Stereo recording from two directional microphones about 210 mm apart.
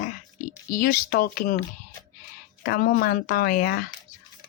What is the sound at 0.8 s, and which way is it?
Speech, 40° left (ahead or behind).